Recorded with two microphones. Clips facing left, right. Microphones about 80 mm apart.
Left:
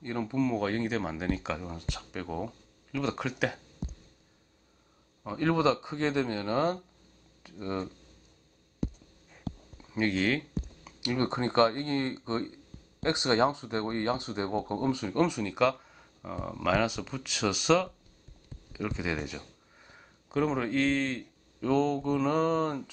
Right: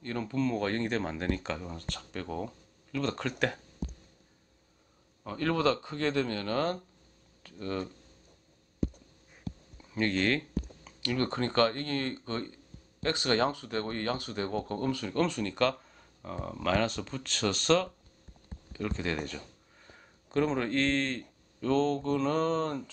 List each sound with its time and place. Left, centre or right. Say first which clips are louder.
0.0 s speech: left 2 dB; centre
5.2 s speech: left 2 dB; centre
9.8 s a sound: left 1 dB; centre
11.0 s speech: left 1 dB; centre